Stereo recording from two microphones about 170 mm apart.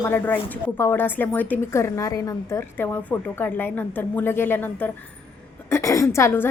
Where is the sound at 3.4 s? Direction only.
10° left (ahead or behind).